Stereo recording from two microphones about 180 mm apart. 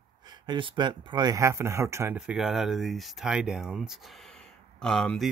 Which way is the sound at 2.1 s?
5° right (ahead or behind).